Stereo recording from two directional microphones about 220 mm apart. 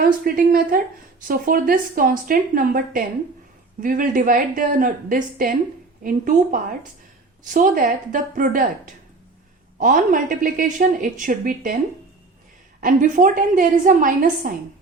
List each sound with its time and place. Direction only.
0.0 s a woman's voice: 40° right (ahead or behind)
12.8 s a woman's voice: 35° right (ahead or behind)